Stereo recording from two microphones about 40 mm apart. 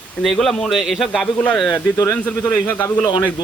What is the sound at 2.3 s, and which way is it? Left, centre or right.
Speech, left.